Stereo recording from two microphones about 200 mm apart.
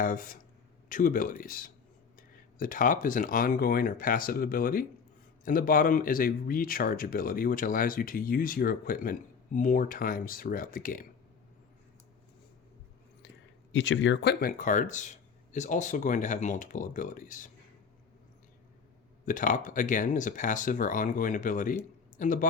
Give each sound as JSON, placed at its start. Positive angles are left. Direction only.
{"t": 0.0, "sound": "speech", "side_deg": 45}
{"t": 13.7, "sound": "speech", "side_deg": 65}
{"t": 19.2, "sound": "speech", "side_deg": 40}